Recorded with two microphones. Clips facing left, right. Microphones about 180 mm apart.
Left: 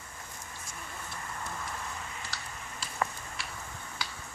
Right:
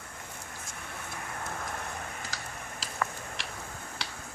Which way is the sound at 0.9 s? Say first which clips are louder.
Right 3 dB; 65° right (ahead or behind).